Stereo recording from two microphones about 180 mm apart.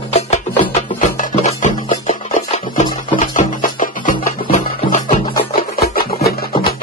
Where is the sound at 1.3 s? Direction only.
40° left (ahead or behind).